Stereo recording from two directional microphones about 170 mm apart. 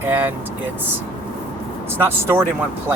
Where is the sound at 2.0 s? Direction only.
15° right (ahead or behind).